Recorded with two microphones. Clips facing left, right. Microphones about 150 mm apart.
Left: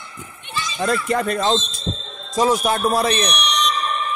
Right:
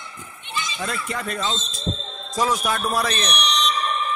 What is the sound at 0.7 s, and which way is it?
Speech, 45° left (ahead or behind).